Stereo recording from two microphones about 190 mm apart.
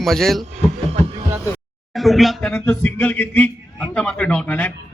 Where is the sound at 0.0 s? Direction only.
Centre (ahead or behind).